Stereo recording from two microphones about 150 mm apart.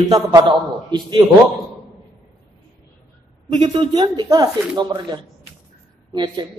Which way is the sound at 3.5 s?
35° right (ahead or behind).